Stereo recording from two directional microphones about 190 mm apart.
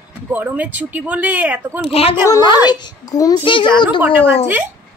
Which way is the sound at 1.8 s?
30° left (ahead or behind).